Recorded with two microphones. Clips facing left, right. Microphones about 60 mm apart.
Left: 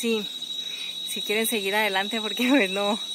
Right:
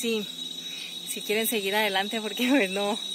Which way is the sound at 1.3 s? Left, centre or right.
Left.